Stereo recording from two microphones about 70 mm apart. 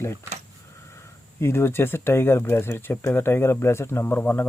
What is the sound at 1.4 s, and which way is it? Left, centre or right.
Speech, left.